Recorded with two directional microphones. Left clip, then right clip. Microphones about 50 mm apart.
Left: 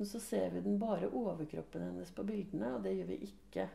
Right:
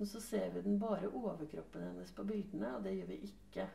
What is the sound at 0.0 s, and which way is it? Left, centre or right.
Speech, left.